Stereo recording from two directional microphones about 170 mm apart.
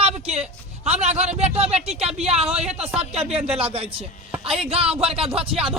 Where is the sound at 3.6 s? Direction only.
35° right (ahead or behind).